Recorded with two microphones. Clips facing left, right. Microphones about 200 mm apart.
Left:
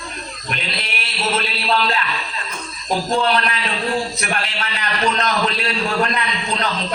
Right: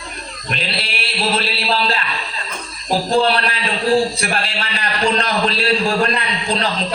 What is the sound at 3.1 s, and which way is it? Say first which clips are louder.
A man's voice: right 3 dB; 30° right (ahead or behind).